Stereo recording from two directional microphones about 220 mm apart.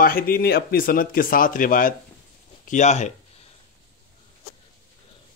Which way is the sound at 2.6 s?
35° left (ahead or behind).